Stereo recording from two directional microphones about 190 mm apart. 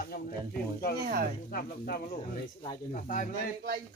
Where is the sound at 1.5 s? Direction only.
50° left (ahead or behind).